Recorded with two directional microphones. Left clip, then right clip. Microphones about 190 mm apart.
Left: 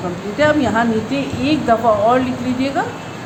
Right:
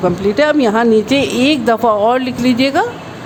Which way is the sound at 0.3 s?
60° right (ahead or behind).